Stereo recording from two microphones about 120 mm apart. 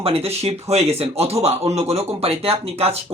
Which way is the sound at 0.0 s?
55° right (ahead or behind).